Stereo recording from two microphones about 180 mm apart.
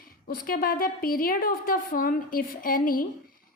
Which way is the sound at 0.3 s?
55° left (ahead or behind).